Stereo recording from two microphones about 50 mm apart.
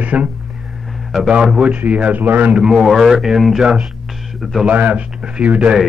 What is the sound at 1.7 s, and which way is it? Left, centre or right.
Speech, right.